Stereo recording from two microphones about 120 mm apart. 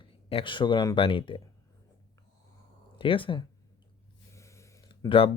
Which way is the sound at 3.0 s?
45° left (ahead or behind).